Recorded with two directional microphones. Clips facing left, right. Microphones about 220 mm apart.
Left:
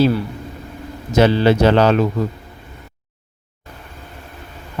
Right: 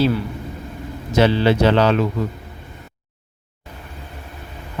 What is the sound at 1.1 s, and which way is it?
Speech, 45° left (ahead or behind).